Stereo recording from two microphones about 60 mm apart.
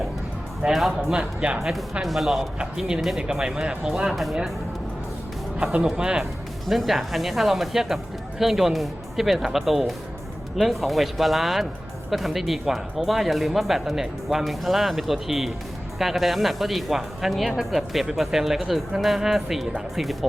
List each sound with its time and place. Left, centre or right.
0.6 s speech: centre
1.1 s speech: centre
4.1 s speech: centre
5.7 s speech: centre
6.7 s speech: centre